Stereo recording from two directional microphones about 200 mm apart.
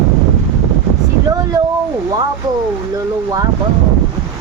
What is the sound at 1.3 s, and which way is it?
Speech, 20° right (ahead or behind).